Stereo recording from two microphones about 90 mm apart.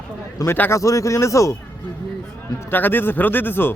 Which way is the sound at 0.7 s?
35° left (ahead or behind).